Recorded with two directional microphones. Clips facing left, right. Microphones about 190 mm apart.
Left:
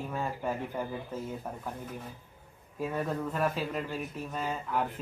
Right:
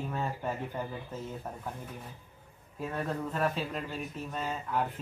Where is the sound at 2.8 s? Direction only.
5° left (ahead or behind).